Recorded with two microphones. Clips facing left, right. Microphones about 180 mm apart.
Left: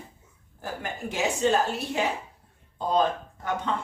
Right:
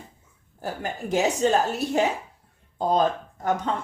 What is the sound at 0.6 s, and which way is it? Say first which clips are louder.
Speech: right 3 dB; 35° right (ahead or behind).